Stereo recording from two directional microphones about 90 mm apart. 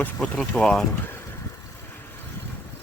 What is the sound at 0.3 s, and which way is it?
Speech, 5° left (ahead or behind).